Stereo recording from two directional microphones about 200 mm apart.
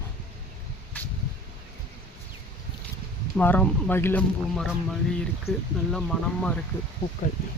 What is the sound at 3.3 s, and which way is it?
Speech, 10° left (ahead or behind).